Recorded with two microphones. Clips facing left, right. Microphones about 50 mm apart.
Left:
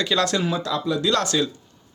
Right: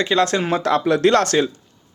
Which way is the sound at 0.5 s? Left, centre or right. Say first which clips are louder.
Right 7 dB; right.